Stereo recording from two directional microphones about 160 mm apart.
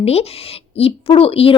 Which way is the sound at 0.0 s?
40° left (ahead or behind).